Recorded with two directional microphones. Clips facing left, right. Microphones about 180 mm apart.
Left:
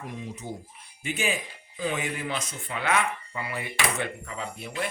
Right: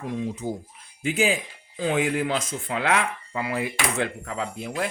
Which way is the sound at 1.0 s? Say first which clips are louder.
Right 6 dB; 90° right.